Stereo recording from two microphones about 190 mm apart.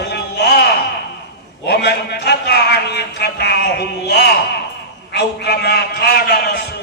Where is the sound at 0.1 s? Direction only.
55° left (ahead or behind).